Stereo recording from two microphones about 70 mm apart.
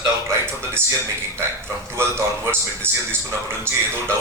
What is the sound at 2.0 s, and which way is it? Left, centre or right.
Speech, right.